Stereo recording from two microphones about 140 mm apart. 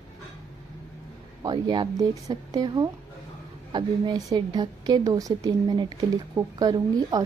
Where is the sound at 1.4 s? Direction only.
30° right (ahead or behind).